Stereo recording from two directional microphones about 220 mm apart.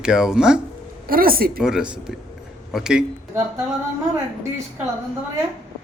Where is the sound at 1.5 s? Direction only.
5° right (ahead or behind).